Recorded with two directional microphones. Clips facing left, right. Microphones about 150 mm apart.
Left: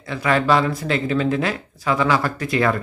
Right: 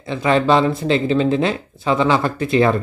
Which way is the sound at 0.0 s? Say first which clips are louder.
Right 3 dB; 25° right (ahead or behind).